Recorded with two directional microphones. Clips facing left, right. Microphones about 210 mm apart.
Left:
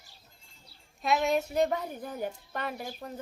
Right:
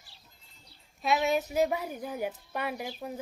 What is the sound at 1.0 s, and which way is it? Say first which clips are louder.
Speech: even; centre (ahead or behind).